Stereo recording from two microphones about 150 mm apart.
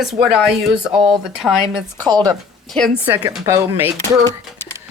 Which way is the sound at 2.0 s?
30° right (ahead or behind).